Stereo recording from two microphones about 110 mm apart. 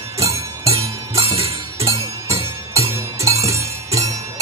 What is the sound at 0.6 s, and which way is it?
Music, 65° right (ahead or behind).